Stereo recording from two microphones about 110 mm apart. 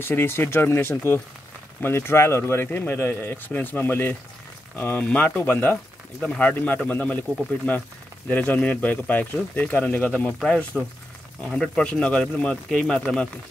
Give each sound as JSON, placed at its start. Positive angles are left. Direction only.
{"t": 0.0, "sound": "speech", "side_deg": 20}
{"t": 8.3, "sound": "speech", "side_deg": 15}